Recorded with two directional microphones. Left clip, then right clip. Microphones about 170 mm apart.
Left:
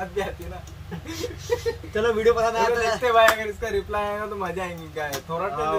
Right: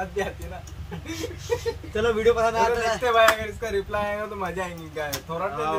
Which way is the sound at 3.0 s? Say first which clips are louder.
Left 1 dB; centre (ahead or behind).